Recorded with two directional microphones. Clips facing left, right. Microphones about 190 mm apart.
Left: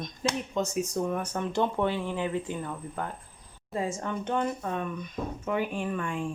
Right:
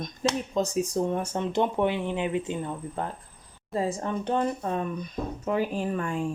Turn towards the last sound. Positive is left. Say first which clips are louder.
# right 3 dB
turn(degrees=-40)  # may be behind; listen again after turning